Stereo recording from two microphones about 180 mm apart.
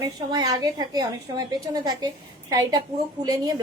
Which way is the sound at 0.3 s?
20° right (ahead or behind).